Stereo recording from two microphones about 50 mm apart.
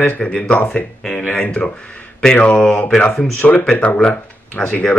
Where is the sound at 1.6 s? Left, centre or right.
Left.